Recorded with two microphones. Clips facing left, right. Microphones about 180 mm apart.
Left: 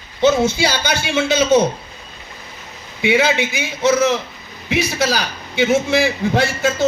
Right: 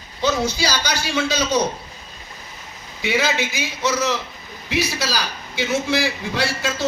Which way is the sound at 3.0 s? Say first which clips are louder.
Left 5 dB; 60° left (ahead or behind).